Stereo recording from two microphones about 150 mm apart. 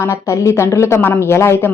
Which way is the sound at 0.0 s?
20° left (ahead or behind).